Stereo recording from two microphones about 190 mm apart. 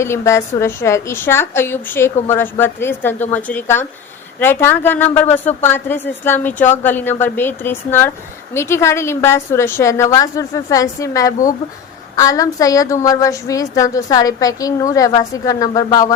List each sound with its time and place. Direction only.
0.0 s a woman's voice: 15° left (ahead or behind)